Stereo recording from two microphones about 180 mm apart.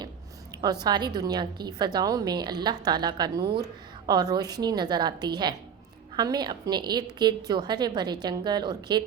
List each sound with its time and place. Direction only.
0.6 s a woman's voice: 25° right (ahead or behind)